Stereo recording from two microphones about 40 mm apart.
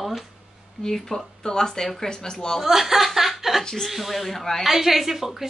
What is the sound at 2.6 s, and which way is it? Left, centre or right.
Chuckle, centre.